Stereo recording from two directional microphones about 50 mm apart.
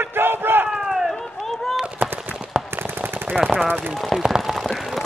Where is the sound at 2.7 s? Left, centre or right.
Right.